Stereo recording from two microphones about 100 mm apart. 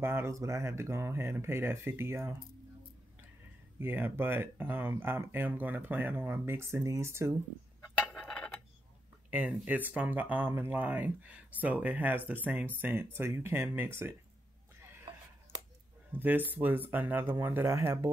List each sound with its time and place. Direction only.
0.0 s speech: 25° right (ahead or behind)
3.8 s speech: 20° right (ahead or behind)
8.1 s a sound: 10° left (ahead or behind)
9.3 s speech: 15° right (ahead or behind)
16.1 s speech: 20° right (ahead or behind)